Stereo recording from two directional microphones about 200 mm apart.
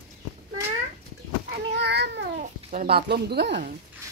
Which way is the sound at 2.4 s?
40° right (ahead or behind).